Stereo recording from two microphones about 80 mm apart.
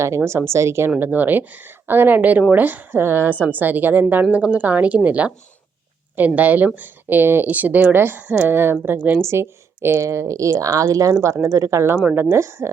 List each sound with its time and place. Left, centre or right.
0.2 s a woman's voice: right